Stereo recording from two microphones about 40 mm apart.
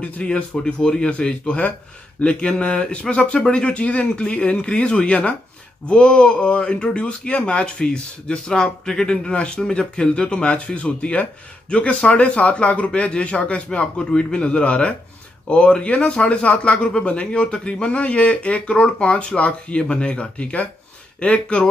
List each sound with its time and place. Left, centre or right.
0.0 s speech: left
10.4 s speech: left